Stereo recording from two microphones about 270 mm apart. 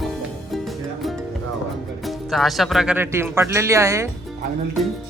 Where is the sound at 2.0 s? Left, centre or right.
Centre.